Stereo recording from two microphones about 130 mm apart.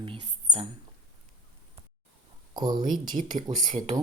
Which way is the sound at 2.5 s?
30° right (ahead or behind).